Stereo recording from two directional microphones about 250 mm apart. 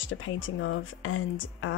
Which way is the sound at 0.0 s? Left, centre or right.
Left.